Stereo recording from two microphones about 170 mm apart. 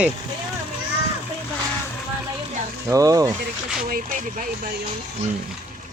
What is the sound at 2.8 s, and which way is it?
Speech, 20° right (ahead or behind).